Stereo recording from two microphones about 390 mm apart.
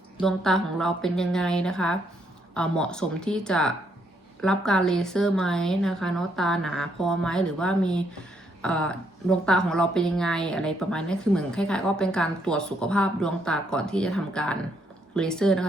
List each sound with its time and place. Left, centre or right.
0.2 s speech: centre